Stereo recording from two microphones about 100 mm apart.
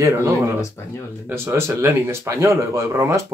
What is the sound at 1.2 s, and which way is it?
Speech, 25° right (ahead or behind).